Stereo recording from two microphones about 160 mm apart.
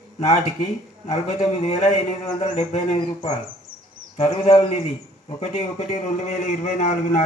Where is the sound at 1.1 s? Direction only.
40° left (ahead or behind).